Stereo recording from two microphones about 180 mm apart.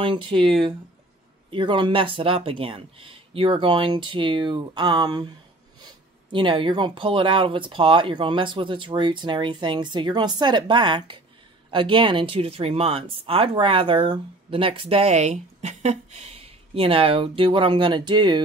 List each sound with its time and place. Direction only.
0.0 s speech: 25° right (ahead or behind)
1.5 s speech: 25° right (ahead or behind)
6.3 s speech: 25° right (ahead or behind)